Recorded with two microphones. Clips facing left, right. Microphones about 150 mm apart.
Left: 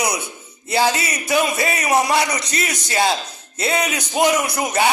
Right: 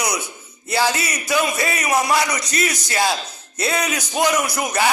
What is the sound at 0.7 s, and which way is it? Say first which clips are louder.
A man's voice: left 2 dB; 25° left (ahead or behind).